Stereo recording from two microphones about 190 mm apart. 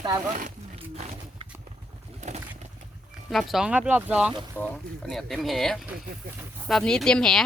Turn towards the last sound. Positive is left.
turn(degrees=5)  # may be behind; listen again after turning